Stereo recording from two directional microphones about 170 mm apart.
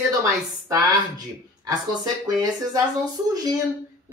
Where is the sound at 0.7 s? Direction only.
20° right (ahead or behind).